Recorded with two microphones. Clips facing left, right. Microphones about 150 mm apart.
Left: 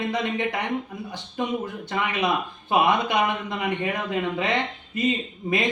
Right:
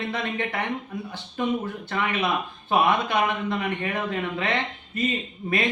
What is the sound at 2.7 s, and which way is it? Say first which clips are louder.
Speech: left 1 dB; 15° left (ahead or behind).